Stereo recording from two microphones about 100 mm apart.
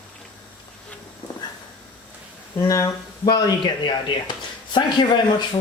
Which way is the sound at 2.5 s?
35° left (ahead or behind).